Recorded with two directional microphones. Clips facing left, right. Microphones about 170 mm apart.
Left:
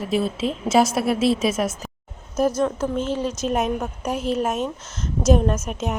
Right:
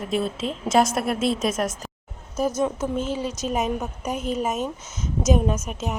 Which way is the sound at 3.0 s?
5° right (ahead or behind).